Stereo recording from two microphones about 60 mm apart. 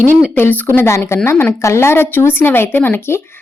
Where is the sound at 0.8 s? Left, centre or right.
Left.